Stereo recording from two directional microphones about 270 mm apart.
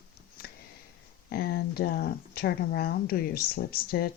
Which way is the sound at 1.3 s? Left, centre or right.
Left.